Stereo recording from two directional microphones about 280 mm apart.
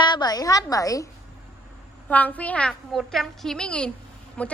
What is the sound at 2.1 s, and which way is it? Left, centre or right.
A woman's voice, centre.